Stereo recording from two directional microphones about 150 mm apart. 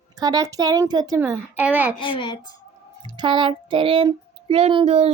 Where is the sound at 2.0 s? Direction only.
35° left (ahead or behind).